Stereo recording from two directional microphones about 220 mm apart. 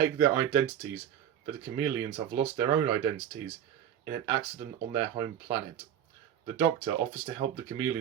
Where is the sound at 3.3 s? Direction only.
60° right (ahead or behind).